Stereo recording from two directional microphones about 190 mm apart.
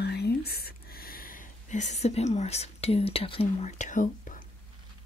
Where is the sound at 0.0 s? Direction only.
60° left (ahead or behind); by 4.5 s 40° left (ahead or behind).